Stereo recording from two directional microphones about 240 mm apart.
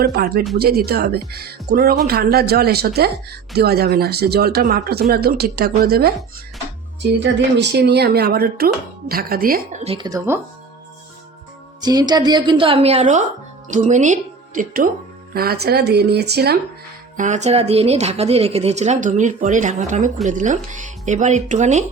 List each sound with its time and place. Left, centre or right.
0.0 s speech: right
9.8 s speech: right
11.8 s a woman's voice: centre; by 16.6 s right
17.2 s speech: right